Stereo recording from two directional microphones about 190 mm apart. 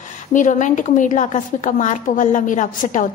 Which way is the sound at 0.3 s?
40° left (ahead or behind).